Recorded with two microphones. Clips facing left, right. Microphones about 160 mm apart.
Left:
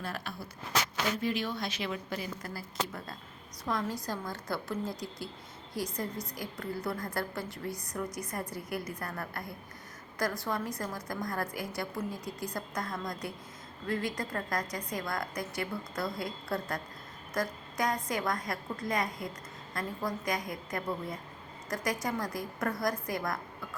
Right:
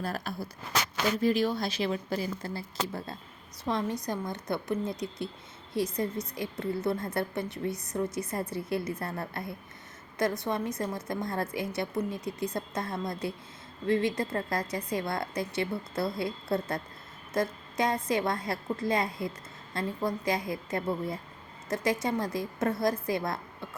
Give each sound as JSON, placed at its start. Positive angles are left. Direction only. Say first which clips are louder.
{"t": 0.0, "sound": "a woman's voice", "louder": "right 5 dB", "side_deg": -40}